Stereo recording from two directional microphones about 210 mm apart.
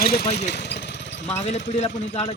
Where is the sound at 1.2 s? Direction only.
30° left (ahead or behind).